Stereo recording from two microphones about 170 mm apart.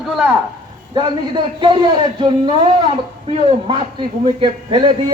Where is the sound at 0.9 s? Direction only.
25° right (ahead or behind).